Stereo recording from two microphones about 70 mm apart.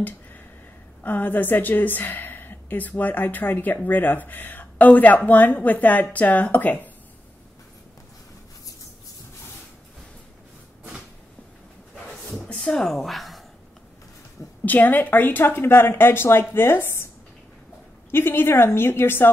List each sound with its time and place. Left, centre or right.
1.0 s a woman's voice: left
12.6 s speech: centre
14.6 s speech: left
18.1 s speech: left